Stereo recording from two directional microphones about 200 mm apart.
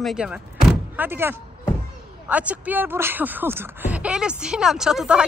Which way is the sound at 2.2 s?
5° right (ahead or behind).